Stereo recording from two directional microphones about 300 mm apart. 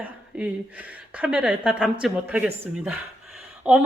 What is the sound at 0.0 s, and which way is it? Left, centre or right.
Speech, centre.